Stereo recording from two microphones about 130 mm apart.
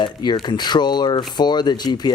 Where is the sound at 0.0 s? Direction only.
35° left (ahead or behind).